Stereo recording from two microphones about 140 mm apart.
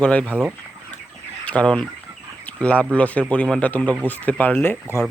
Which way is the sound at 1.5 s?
10° left (ahead or behind).